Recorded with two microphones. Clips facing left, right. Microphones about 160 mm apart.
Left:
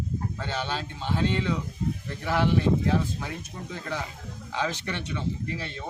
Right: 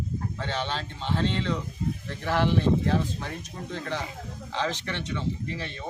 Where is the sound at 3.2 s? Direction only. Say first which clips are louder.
Even; 5° left (ahead or behind).